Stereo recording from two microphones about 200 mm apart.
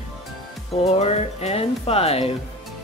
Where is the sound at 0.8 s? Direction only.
30° left (ahead or behind).